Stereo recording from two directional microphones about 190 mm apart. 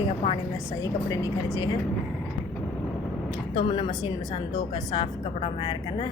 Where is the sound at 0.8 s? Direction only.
20° left (ahead or behind).